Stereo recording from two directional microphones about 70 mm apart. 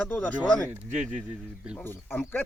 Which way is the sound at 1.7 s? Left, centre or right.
Left.